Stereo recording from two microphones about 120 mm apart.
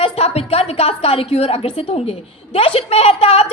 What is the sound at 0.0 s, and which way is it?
A woman's voice, 55° left (ahead or behind).